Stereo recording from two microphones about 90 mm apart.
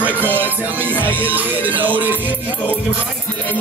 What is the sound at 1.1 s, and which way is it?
Music, 20° right (ahead or behind).